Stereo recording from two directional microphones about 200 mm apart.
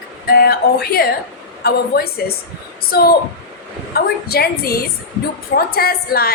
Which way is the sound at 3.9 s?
50° left (ahead or behind).